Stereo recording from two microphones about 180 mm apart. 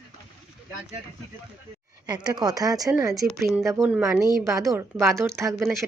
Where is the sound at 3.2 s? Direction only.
Centre (ahead or behind).